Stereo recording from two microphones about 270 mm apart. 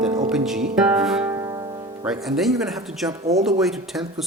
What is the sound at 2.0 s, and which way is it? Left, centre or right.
Speech, centre.